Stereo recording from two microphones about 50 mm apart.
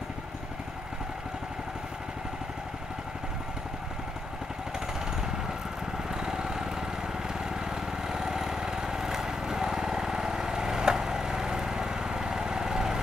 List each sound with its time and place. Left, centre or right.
6.1 s lawn mower: centre
7.7 s lawn mower: centre